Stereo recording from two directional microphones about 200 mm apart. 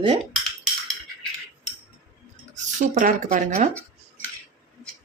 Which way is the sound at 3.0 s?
40° right (ahead or behind).